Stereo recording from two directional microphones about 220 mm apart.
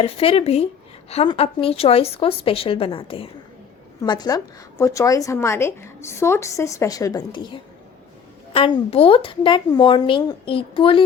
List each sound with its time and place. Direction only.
0.0 s a woman's voice: 25° left (ahead or behind)